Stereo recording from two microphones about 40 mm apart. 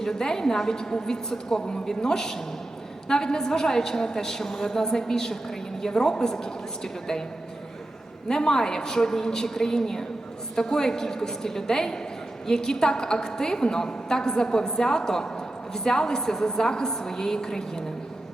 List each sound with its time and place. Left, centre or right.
0.0 s a woman's voice: centre
8.3 s a woman's voice: centre